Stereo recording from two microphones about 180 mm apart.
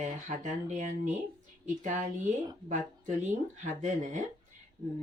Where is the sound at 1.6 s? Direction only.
45° right (ahead or behind).